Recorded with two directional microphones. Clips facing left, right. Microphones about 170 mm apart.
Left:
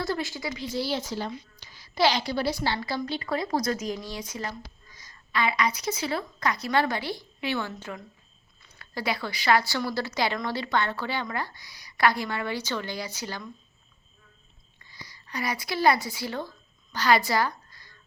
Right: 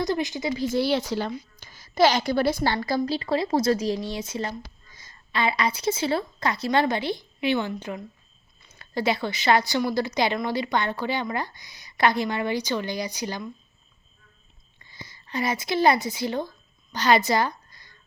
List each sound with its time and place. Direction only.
0.0 s speech: 20° right (ahead or behind)
0.5 s speech: 45° right (ahead or behind); by 1.3 s 70° right (ahead or behind)
1.5 s a woman's voice: 50° right (ahead or behind)
3.2 s a woman's voice: 30° right (ahead or behind)
14.8 s a woman's voice: 25° right (ahead or behind)